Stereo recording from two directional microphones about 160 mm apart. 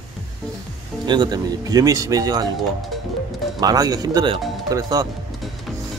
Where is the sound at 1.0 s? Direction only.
25° right (ahead or behind).